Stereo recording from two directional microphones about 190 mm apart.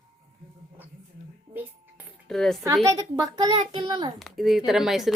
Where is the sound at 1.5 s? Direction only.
10° right (ahead or behind).